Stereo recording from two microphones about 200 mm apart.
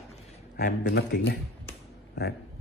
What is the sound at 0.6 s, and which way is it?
Speech, 45° left (ahead or behind).